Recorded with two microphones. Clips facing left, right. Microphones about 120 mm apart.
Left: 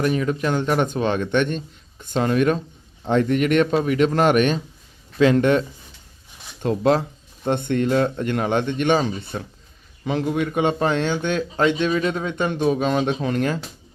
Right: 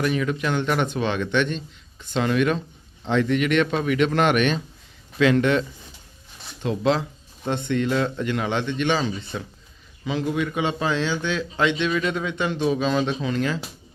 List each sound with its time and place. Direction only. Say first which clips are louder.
0.0 s speech: left 2 dB; 35° left (ahead or behind)